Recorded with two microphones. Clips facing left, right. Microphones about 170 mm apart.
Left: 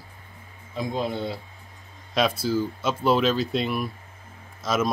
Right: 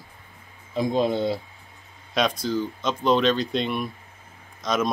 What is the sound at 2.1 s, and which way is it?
Speech, 5° left (ahead or behind).